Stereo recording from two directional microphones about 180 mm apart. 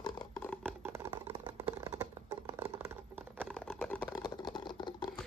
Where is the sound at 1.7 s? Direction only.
15° right (ahead or behind).